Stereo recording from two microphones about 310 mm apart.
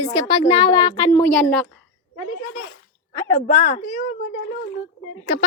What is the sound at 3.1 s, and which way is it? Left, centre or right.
Speech, centre.